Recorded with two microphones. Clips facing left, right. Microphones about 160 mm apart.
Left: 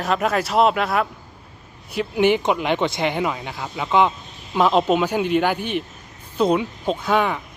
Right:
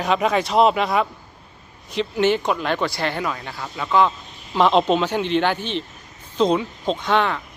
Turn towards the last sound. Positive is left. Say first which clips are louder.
# even
turn(degrees=10)  # may be behind; listen again after turning